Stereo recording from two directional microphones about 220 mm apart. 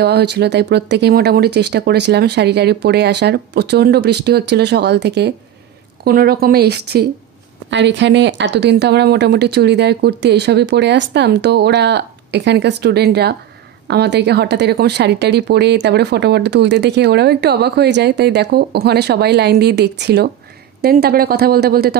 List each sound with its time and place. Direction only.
0.0 s speech: 50° right (ahead or behind)